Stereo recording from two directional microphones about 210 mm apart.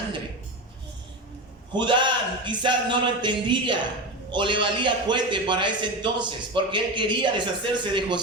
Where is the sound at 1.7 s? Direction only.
20° right (ahead or behind).